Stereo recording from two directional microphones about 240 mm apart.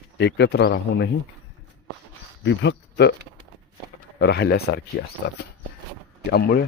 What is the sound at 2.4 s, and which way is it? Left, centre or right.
Speech, left.